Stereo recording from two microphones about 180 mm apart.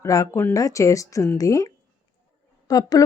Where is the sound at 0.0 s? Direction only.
15° left (ahead or behind).